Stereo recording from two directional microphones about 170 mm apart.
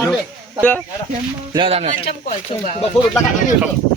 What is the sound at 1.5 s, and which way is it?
Speech, 30° right (ahead or behind).